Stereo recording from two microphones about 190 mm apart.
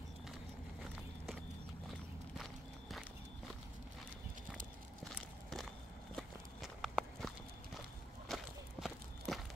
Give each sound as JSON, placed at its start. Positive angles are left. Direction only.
{"t": 5.0, "sound": "walk", "side_deg": 0}
{"t": 8.3, "sound": "walk", "side_deg": 0}